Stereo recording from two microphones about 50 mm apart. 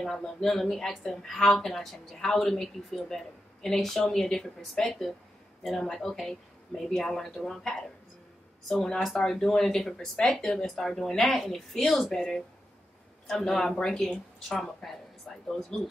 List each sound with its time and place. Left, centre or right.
0.0 s a woman's voice: centre